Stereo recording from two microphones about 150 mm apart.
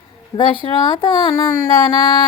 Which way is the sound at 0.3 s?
30° left (ahead or behind).